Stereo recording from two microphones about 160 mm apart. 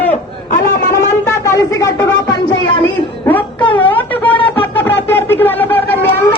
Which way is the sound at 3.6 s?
30° left (ahead or behind).